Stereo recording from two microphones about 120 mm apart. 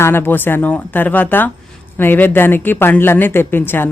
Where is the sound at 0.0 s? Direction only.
20° left (ahead or behind).